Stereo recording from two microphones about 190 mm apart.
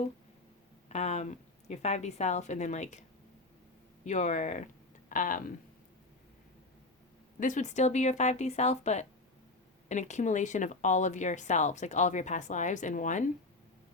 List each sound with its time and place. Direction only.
0.9 s speech: 35° left (ahead or behind)
4.0 s speech: 40° left (ahead or behind)
7.3 s speech: 40° left (ahead or behind)